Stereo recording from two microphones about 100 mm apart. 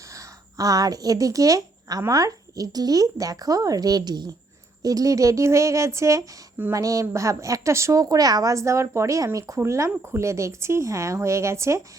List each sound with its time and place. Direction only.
0.1 s a woman's voice: 35° right (ahead or behind)